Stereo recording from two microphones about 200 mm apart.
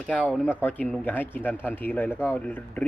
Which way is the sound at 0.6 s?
10° left (ahead or behind).